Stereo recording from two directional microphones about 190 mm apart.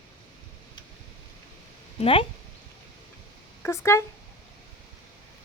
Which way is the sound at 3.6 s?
15° left (ahead or behind).